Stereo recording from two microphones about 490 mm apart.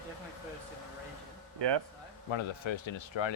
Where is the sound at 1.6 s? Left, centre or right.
Right.